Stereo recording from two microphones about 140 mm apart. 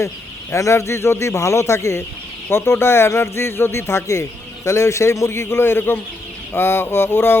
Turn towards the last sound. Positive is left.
turn(degrees=15)  # may be behind; listen again after turning